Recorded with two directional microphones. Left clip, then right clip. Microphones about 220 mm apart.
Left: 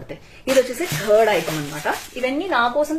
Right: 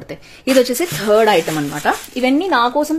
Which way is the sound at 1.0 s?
50° right (ahead or behind).